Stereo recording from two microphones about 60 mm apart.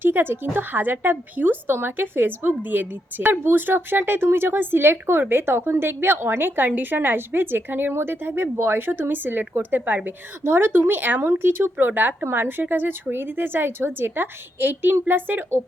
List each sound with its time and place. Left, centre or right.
0.0 s speech: right